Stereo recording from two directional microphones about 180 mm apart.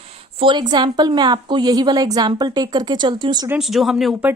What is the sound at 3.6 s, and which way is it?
Speech, centre (ahead or behind).